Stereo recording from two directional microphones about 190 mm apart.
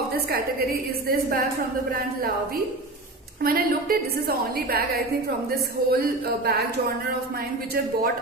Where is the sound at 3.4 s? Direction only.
50° right (ahead or behind).